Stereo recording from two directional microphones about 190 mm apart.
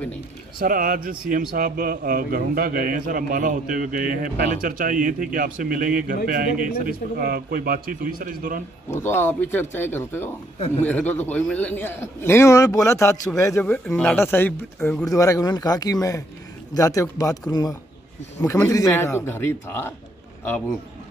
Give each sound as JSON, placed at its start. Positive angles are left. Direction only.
{"t": 0.6, "sound": "a man's voice", "side_deg": -50}
{"t": 8.9, "sound": "a man's voice", "side_deg": 10}